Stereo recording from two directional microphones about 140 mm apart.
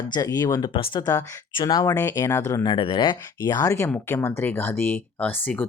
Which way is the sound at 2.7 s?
35° left (ahead or behind).